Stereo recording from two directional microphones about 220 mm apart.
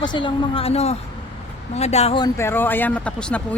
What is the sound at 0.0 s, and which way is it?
A woman's voice, 20° left (ahead or behind).